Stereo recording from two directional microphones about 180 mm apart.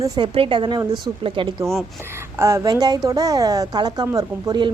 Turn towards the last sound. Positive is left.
turn(degrees=-20)  # may be behind; listen again after turning